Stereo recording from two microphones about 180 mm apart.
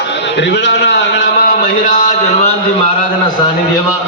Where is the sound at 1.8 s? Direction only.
45° left (ahead or behind).